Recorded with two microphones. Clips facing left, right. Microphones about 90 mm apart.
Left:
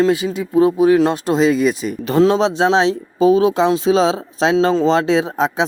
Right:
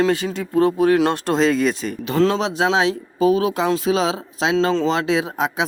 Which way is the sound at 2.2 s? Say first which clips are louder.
Left 5 dB; 25° left (ahead or behind).